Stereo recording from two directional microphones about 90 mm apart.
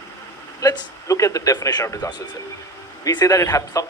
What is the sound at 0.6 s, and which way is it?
Speech, 40° left (ahead or behind).